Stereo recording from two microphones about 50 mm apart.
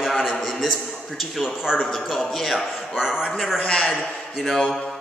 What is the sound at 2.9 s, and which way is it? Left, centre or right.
Speech, centre.